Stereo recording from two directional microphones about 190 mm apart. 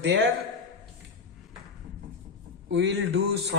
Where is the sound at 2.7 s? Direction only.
70° right (ahead or behind).